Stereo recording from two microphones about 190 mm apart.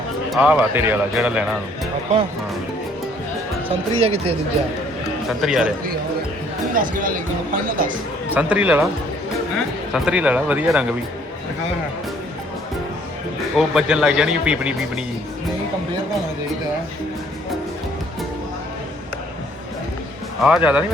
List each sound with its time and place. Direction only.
0.3 s speech: 5° right (ahead or behind)
3.9 s speech: 30° right (ahead or behind)
5.4 s speech: centre (ahead or behind)
6.9 s speech: 45° right (ahead or behind)
8.3 s speech: 5° right (ahead or behind)
13.6 s speech: 5° right (ahead or behind)
20.4 s speech: 5° right (ahead or behind)